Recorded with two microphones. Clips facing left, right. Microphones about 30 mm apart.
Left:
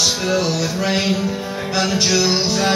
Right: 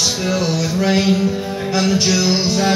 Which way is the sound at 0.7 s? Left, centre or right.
Centre.